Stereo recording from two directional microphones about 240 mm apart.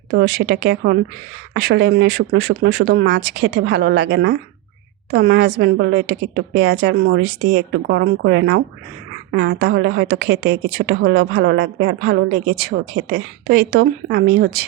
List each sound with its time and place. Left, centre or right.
0.2 s a woman's voice: right